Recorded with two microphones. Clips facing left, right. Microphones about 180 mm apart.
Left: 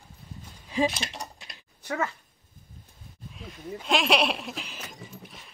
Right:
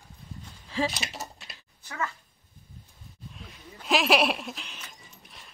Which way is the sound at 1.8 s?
60° left (ahead or behind).